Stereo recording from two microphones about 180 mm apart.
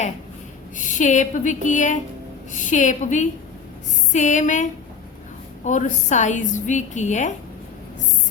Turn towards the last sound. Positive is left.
turn(degrees=40)  # may be behind; listen again after turning